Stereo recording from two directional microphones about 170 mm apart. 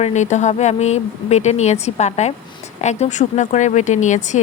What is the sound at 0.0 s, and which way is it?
A woman's voice, 45° left (ahead or behind).